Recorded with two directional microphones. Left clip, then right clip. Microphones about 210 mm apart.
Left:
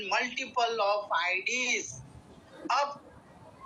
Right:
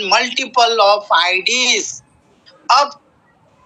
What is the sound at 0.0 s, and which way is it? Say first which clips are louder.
A man's voice: right 15 dB; 45° right (ahead or behind).